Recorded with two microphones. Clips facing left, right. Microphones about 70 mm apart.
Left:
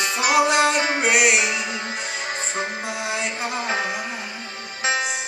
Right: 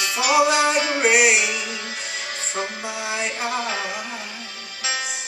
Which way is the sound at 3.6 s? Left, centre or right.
Left.